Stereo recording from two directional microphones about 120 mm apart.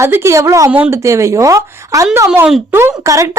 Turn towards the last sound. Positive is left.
turn(degrees=-25)  # may be behind; listen again after turning